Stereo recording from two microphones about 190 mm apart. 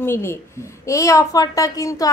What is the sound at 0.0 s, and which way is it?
A woman's voice, 15° left (ahead or behind).